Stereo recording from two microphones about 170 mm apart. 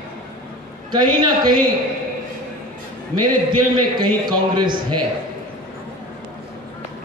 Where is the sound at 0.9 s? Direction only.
25° right (ahead or behind).